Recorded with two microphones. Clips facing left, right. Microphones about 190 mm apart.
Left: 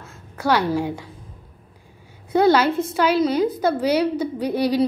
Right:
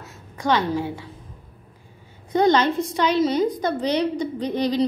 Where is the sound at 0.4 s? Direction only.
10° left (ahead or behind).